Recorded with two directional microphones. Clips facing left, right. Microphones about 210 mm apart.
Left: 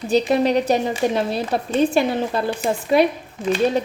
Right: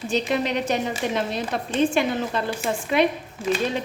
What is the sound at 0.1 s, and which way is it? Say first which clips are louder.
A woman's voice: left 7 dB; 35° left (ahead or behind).